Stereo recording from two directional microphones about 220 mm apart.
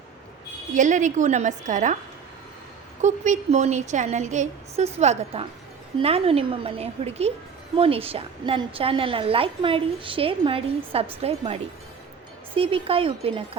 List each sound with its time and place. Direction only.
0.7 s a woman's voice: 35° right (ahead or behind)
3.0 s a woman's voice: 30° right (ahead or behind)